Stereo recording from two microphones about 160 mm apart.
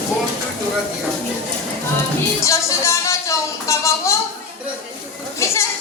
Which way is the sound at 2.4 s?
20° left (ahead or behind).